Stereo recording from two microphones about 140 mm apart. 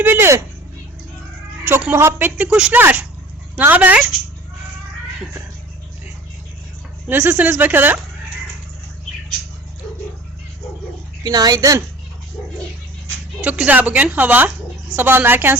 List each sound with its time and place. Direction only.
0.0 s speech: 15° right (ahead or behind)
1.6 s speech: 15° right (ahead or behind)
7.1 s speech: 15° right (ahead or behind)
11.2 s speech: 30° right (ahead or behind)
13.4 s speech: 10° right (ahead or behind)